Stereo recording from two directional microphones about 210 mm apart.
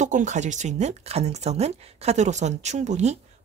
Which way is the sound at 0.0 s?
35° right (ahead or behind).